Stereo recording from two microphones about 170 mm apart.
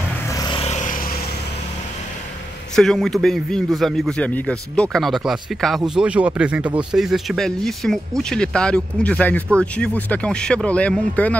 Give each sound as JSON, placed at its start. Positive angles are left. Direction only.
{"t": 0.3, "sound": "vehicle", "side_deg": 20}
{"t": 0.6, "sound": "vehicle", "side_deg": 45}
{"t": 2.7, "sound": "speech", "side_deg": 0}